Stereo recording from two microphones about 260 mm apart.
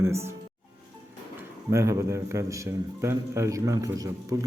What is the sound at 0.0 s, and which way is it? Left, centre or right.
Speech, centre.